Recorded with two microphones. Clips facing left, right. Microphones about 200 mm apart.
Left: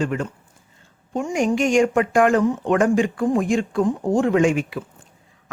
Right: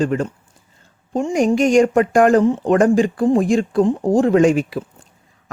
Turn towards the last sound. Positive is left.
turn(degrees=-35)  # may be behind; listen again after turning